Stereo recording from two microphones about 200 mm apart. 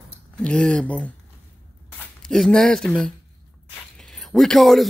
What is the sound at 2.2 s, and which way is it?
A man's voice, centre (ahead or behind).